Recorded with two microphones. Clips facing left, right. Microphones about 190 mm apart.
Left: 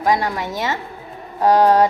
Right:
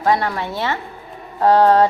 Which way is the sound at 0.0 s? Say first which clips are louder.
Right 1 dB; 15° left (ahead or behind).